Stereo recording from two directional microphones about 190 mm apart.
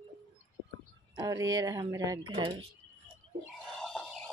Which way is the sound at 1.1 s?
20° right (ahead or behind).